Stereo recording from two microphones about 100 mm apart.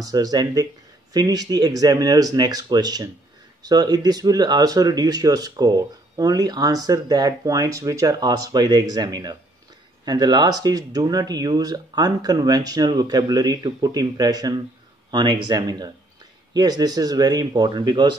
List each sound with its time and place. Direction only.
0.0 s speech: 40° right (ahead or behind)